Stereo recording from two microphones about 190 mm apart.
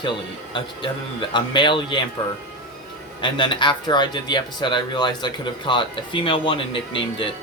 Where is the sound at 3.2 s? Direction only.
25° left (ahead or behind).